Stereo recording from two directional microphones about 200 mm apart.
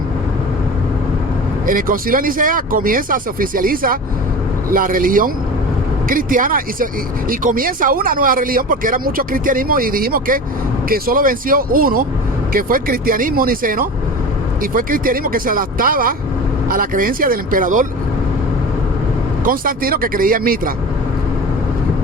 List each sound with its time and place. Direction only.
1.6 s speech: 45° right (ahead or behind)
19.5 s speech: 45° right (ahead or behind)